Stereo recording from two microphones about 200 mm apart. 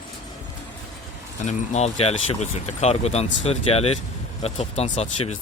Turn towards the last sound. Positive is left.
turn(degrees=35)  # may be behind; listen again after turning